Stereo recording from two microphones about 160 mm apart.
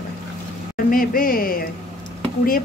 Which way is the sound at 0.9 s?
60° left (ahead or behind).